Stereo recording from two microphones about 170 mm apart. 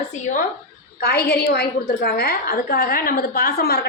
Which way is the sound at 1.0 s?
70° left (ahead or behind).